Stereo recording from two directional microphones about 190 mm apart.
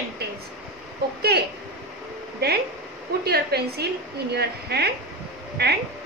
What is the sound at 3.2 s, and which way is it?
A woman's voice, 55° right (ahead or behind).